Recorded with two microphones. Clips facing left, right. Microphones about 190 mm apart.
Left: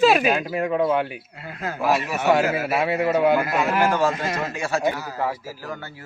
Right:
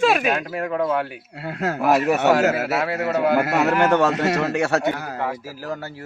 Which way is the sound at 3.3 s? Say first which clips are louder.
Right 2 dB; 70° right (ahead or behind).